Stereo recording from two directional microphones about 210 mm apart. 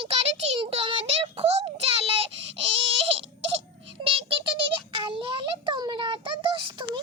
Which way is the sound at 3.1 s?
25° right (ahead or behind).